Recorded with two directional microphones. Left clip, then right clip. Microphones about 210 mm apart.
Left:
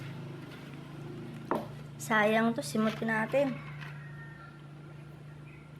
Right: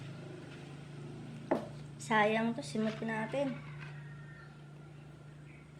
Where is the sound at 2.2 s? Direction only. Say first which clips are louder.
Left 3 dB; 35° left (ahead or behind).